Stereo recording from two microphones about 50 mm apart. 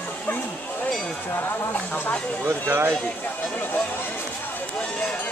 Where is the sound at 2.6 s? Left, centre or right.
Right.